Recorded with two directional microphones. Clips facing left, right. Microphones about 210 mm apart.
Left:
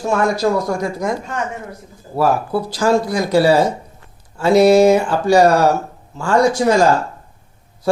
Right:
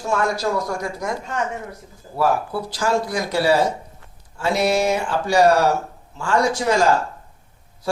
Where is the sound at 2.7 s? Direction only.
35° left (ahead or behind).